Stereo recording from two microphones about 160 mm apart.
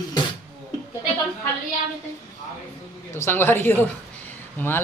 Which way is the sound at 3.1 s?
15° left (ahead or behind).